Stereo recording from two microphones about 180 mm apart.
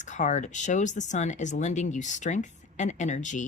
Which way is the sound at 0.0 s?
45° left (ahead or behind).